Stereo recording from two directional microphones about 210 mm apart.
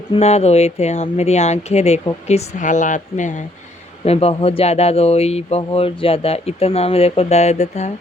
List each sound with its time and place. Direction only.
0.1 s speech: 30° left (ahead or behind)